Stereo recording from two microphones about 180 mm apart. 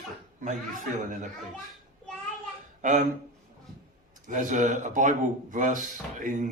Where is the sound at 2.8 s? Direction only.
45° right (ahead or behind).